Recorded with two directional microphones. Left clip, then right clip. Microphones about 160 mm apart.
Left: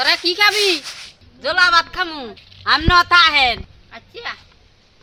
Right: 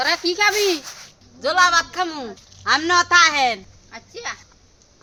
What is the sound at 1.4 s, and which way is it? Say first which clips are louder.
Speech: left 2 dB; 65° right (ahead or behind).